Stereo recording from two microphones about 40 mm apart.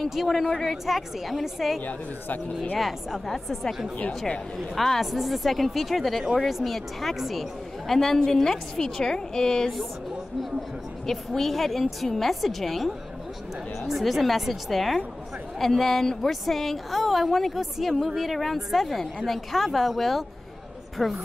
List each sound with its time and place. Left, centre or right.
0.0 s a woman's voice: centre
1.9 s speech: left
4.7 s a woman's voice: centre
7.9 s a woman's voice: centre
11.1 s a woman's voice: centre